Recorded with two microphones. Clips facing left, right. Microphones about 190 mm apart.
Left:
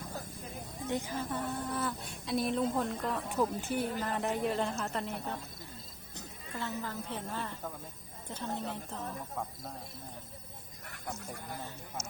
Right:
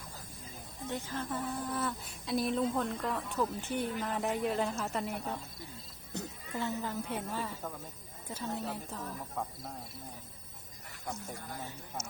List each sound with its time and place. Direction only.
0.9 s speech: 15° left (ahead or behind)
1.2 s speech: centre (ahead or behind)
6.5 s a woman's voice: 15° right (ahead or behind)